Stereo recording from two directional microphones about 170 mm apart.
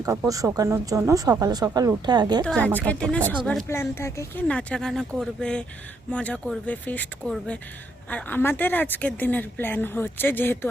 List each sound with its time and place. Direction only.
0.3 s speech: 20° right (ahead or behind)
2.4 s speech: 5° left (ahead or behind)